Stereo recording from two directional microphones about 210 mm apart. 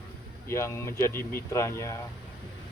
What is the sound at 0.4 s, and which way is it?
Speech, 10° left (ahead or behind).